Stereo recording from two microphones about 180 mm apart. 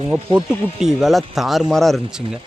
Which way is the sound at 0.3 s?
Centre (ahead or behind).